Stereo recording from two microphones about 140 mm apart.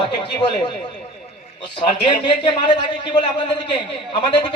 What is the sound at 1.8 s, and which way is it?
Speech, 35° left (ahead or behind).